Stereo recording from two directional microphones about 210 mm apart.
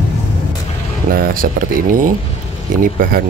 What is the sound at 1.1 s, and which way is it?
Speech, 45° right (ahead or behind).